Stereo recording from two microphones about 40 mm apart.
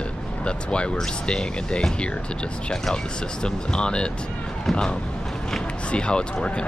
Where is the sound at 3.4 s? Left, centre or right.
Left.